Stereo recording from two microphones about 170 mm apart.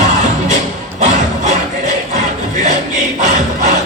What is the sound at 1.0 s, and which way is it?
Music, 45° right (ahead or behind).